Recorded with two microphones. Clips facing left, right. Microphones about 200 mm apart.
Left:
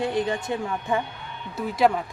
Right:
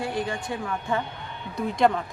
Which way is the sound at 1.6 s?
5° left (ahead or behind).